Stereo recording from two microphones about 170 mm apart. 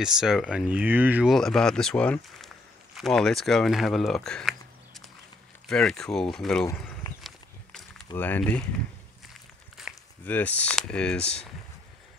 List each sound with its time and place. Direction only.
0.0 s speech: 5° right (ahead or behind)
1.3 s speech: centre (ahead or behind)
6.7 s speech: 15° left (ahead or behind)
8.2 s speech: 10° left (ahead or behind)
9.8 s a sound: centre (ahead or behind)
10.2 s speech: 10° left (ahead or behind)